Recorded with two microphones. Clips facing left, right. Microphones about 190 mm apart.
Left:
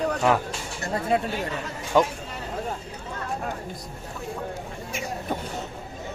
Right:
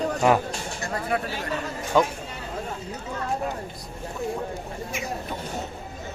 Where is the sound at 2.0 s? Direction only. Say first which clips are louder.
Left 1 dB; 15° left (ahead or behind).